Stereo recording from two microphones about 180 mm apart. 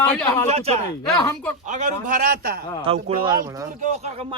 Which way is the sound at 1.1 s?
15° left (ahead or behind).